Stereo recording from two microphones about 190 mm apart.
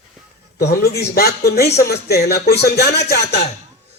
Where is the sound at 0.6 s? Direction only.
60° left (ahead or behind).